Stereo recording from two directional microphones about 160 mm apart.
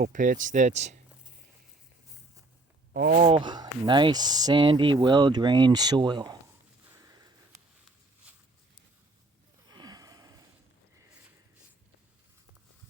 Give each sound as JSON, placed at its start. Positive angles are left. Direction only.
{"t": 0.0, "sound": "speech", "side_deg": -55}
{"t": 2.9, "sound": "speech", "side_deg": -70}
{"t": 3.2, "sound": "speech", "side_deg": -35}
{"t": 7.0, "sound": "sniff", "side_deg": -25}
{"t": 9.6, "sound": "a sound", "side_deg": -25}